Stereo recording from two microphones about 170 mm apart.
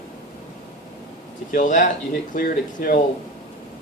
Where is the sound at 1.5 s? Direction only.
50° left (ahead or behind).